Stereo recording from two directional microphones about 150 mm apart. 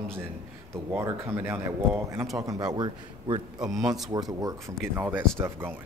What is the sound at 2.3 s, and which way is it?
A man's voice, 25° right (ahead or behind).